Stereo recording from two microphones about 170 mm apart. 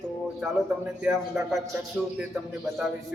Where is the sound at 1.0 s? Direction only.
Centre (ahead or behind).